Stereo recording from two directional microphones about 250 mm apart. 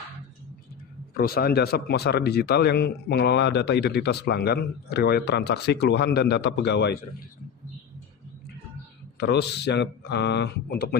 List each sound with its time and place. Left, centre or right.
1.1 s speech: left
9.1 s speech: left